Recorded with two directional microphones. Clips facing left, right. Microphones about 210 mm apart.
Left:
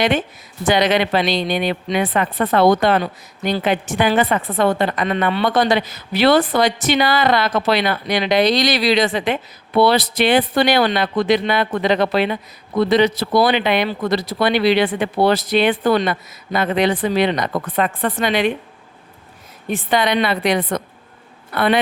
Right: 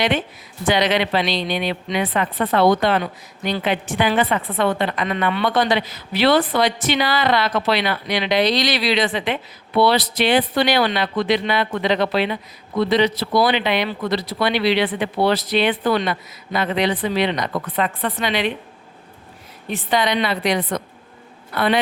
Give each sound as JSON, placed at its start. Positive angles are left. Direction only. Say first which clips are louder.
{"t": 0.6, "sound": "a woman's voice", "louder": "left 2 dB", "side_deg": 45}
{"t": 19.6, "sound": "a woman's voice", "louder": "left 2 dB", "side_deg": 55}